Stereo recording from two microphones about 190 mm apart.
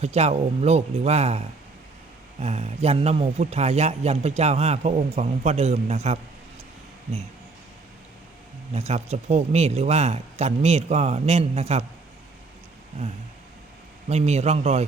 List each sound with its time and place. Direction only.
0.0 s speech: 35° right (ahead or behind)
8.7 s speech: 35° right (ahead or behind)
14.1 s speech: 35° right (ahead or behind)